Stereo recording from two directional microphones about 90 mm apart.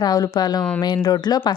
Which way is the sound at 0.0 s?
50° left (ahead or behind).